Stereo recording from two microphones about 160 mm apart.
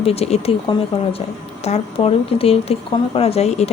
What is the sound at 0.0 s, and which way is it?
Speech, 40° left (ahead or behind).